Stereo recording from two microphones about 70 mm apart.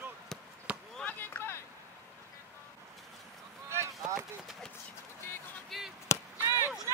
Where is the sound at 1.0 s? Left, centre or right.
Left.